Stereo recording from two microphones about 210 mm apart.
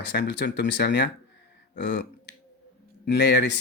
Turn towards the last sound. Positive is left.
turn(degrees=55)  # may be behind; listen again after turning